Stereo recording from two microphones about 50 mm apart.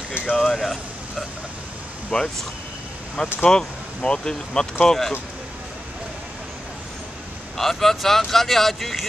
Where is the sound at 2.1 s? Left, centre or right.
Left.